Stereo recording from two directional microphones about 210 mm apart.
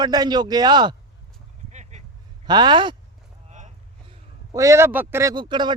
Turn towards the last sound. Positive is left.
turn(degrees=-20)  # may be behind; listen again after turning